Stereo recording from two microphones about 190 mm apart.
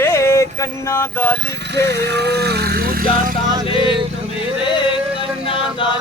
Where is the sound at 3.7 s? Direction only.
30° left (ahead or behind).